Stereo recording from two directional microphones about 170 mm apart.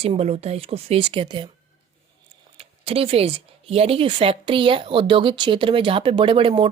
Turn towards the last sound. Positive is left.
turn(degrees=-30)  # may be behind; listen again after turning